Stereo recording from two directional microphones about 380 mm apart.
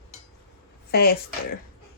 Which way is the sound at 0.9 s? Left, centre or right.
Left.